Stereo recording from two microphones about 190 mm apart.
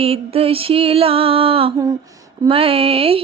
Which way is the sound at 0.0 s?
30° right (ahead or behind).